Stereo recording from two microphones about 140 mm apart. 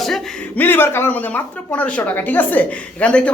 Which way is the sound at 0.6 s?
15° left (ahead or behind).